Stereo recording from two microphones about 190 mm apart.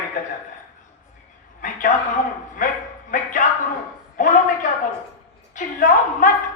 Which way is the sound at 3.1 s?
45° left (ahead or behind).